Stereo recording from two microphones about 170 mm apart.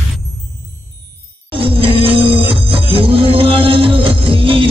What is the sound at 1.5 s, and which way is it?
Music, 30° right (ahead or behind).